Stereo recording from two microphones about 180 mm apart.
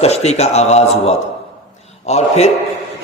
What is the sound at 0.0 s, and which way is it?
A man's voice, 35° left (ahead or behind).